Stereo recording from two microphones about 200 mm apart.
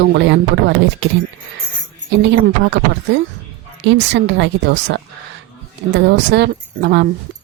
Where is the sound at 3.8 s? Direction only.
65° right (ahead or behind).